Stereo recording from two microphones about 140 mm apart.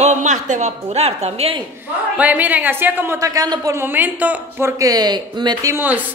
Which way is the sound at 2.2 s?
10° right (ahead or behind).